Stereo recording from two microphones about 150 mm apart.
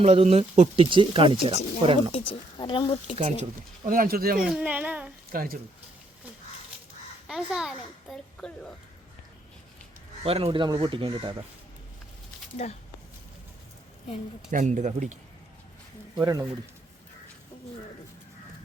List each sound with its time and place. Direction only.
0.0 s speech: 45° right (ahead or behind)
0.9 s speech: 35° right (ahead or behind)
2.1 s speech: 35° left (ahead or behind)
3.2 s speech: 35° right (ahead or behind)
3.8 s speech: 70° right (ahead or behind)
4.4 s speech: 5° right (ahead or behind)
5.3 s speech: 75° right (ahead or behind)
7.3 s a child's voice: 5° right (ahead or behind)
10.2 s speech: 40° right (ahead or behind)
14.5 s speech: 55° right (ahead or behind)
16.2 s speech: 20° right (ahead or behind)